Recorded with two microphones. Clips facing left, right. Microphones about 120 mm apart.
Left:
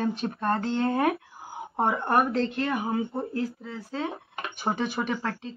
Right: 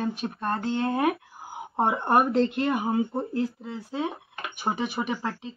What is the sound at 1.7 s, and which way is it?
Speech, 20° right (ahead or behind).